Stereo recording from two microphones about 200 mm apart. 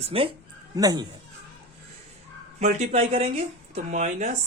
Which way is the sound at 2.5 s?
35° right (ahead or behind).